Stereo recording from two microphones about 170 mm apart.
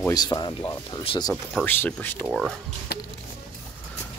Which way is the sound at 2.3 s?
Centre (ahead or behind).